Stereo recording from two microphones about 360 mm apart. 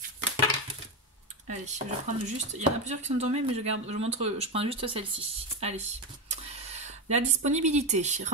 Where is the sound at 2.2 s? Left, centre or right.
Centre.